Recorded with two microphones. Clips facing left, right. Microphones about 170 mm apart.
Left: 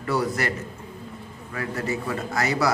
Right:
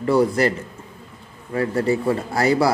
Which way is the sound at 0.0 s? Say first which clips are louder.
Right 8 dB; 30° right (ahead or behind).